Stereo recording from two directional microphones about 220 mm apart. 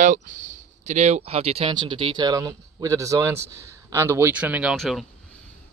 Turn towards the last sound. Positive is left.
turn(degrees=0)  # may be behind; listen again after turning